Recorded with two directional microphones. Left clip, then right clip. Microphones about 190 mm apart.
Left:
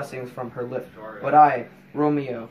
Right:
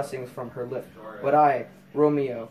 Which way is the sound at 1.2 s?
10° right (ahead or behind).